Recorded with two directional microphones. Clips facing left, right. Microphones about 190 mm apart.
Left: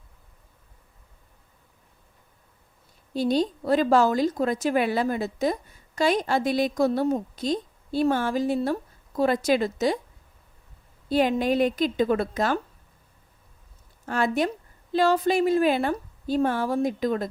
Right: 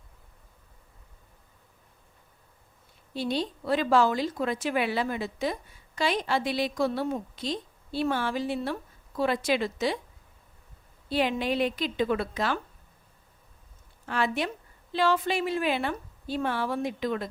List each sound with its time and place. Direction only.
3.1 s a woman's voice: 40° left (ahead or behind)
11.1 s a woman's voice: 45° left (ahead or behind)
14.0 s a woman's voice: 45° left (ahead or behind)